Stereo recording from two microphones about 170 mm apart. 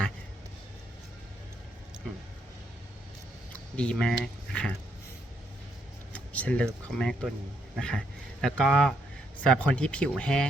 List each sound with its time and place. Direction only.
3.5 s speech: 5° left (ahead or behind)
6.1 s a sound: 10° left (ahead or behind)
6.9 s speech: 5° left (ahead or behind)